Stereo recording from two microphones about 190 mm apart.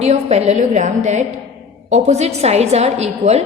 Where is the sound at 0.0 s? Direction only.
35° right (ahead or behind).